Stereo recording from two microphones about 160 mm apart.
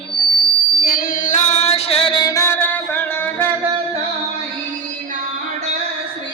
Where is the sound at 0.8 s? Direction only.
65° left (ahead or behind); by 3.4 s 10° left (ahead or behind).